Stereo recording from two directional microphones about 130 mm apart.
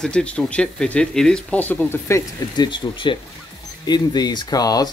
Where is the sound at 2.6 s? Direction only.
35° left (ahead or behind).